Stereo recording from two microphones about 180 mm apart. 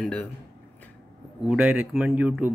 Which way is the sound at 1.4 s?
5° right (ahead or behind).